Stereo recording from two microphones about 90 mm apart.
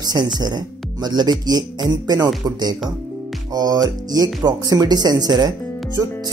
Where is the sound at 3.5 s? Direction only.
50° right (ahead or behind).